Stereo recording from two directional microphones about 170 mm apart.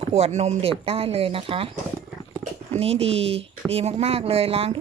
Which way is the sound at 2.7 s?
35° right (ahead or behind).